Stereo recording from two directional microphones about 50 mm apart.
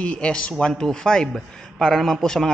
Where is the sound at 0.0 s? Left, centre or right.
Left.